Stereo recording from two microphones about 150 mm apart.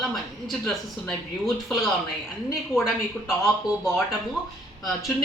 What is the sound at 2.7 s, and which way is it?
Speech, 20° left (ahead or behind).